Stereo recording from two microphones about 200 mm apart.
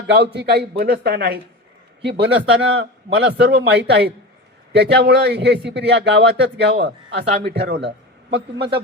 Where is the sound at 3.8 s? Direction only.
60° right (ahead or behind).